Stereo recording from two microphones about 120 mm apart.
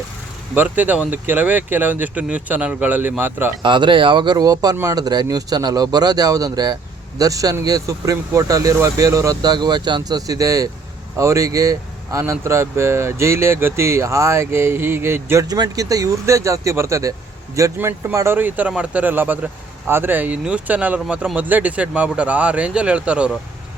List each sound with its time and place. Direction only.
0.5 s speech: 15° right (ahead or behind)
3.6 s speech: 40° right (ahead or behind); by 23.3 s 10° right (ahead or behind)